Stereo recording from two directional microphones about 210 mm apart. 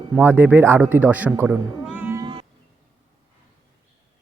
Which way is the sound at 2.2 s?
25° right (ahead or behind).